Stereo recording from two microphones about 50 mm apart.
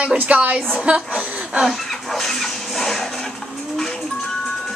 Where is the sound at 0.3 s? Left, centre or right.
Right.